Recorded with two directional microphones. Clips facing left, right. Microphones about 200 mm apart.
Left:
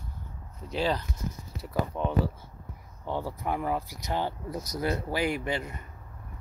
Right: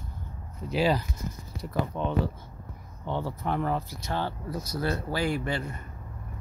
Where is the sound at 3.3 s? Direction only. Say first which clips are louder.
Right 2 dB; 15° left (ahead or behind).